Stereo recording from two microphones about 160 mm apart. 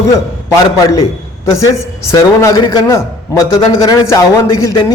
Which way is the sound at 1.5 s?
20° left (ahead or behind).